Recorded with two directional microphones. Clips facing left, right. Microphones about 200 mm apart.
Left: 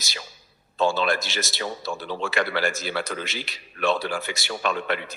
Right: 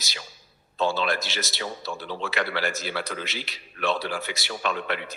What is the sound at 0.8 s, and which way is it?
A man's voice, 45° left (ahead or behind).